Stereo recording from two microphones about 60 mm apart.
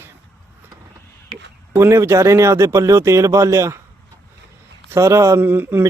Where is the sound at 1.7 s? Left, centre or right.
Right.